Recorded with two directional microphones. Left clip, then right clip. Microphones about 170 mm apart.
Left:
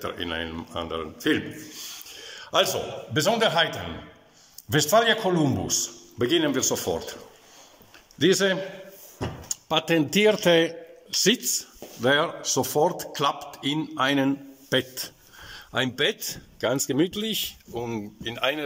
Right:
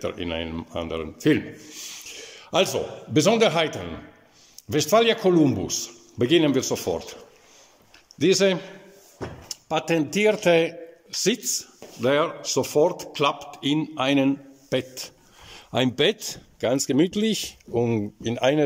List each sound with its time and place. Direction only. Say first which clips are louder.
0.0 s a man's voice: right 1 dB; 15° right (ahead or behind)
8.2 s a man's voice: right 2 dB; 10° right (ahead or behind)
15.5 s speech: right 3 dB; 25° right (ahead or behind)